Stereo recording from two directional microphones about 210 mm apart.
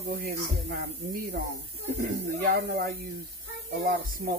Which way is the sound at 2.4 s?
45° right (ahead or behind).